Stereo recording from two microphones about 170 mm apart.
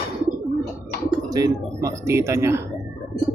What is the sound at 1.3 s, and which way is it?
Speech, 20° right (ahead or behind).